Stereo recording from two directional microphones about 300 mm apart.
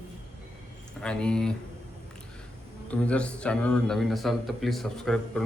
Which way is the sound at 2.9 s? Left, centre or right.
Centre.